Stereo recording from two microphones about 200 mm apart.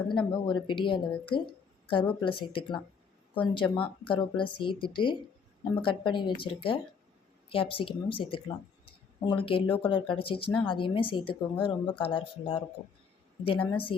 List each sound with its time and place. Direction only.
0.1 s speech: 25° left (ahead or behind)